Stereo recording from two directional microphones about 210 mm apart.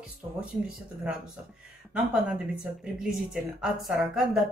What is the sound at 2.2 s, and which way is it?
Speech, 5° right (ahead or behind).